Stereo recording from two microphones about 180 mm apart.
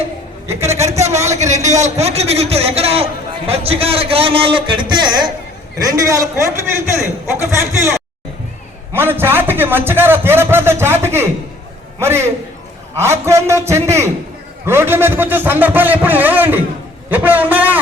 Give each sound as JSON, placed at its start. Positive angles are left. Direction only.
{"t": 1.3, "sound": "a man's voice", "side_deg": -40}